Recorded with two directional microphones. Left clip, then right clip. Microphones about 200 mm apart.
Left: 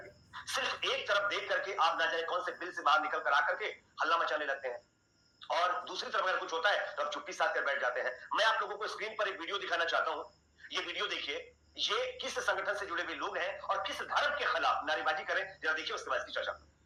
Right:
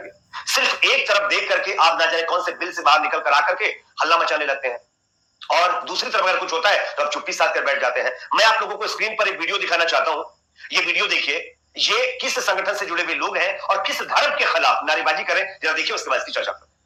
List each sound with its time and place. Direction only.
0.3 s a man's voice: 35° right (ahead or behind)